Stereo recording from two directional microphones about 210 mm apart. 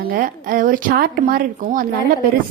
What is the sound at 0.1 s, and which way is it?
A woman's voice, 40° right (ahead or behind).